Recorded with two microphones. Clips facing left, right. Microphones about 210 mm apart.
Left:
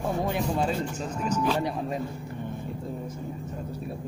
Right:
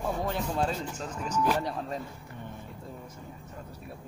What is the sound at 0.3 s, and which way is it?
Speech, 15° left (ahead or behind).